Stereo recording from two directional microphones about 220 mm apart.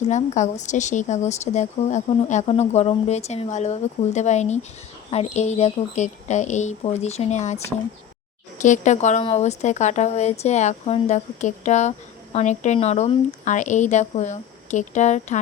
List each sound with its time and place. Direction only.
0.1 s a woman's voice: 30° left (ahead or behind)